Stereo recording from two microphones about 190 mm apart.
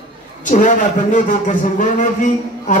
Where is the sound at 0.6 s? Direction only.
40° left (ahead or behind).